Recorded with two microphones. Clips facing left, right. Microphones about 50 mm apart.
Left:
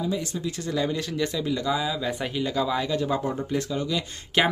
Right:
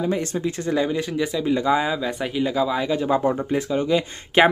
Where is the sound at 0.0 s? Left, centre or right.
Right.